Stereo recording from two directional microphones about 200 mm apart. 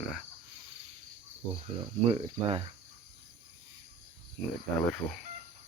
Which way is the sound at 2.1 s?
30° right (ahead or behind).